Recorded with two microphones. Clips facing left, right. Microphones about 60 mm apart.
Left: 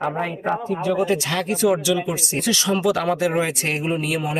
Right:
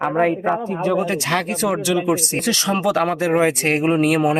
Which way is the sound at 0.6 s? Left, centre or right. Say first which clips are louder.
Right 1 dB; right.